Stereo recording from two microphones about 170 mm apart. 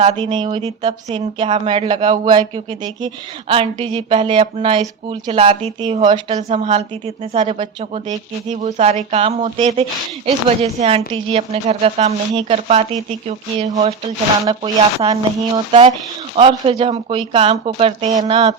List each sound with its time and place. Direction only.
0.0 s speech: 35° right (ahead or behind)
8.0 s speech: 45° right (ahead or behind)
14.6 s speech: 30° right (ahead or behind)